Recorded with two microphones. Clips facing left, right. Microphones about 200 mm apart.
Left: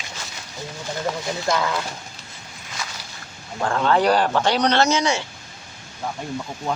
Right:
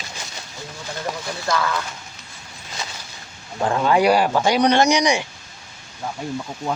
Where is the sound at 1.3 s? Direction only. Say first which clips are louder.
Right 1 dB; 20° left (ahead or behind).